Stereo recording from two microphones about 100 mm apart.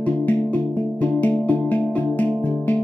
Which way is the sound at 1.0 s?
15° left (ahead or behind).